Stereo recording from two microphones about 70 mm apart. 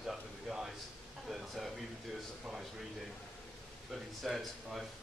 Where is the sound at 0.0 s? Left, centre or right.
Centre.